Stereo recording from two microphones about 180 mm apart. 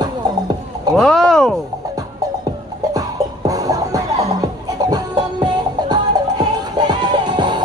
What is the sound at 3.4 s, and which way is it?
Music, 20° right (ahead or behind).